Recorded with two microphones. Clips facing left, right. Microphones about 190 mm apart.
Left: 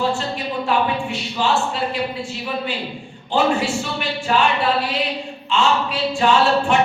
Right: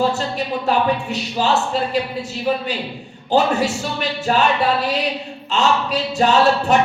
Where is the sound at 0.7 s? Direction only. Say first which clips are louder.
Right 1 dB; 40° right (ahead or behind).